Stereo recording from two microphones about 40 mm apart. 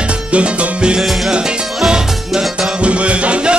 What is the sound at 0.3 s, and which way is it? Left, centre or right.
Salsa music, right.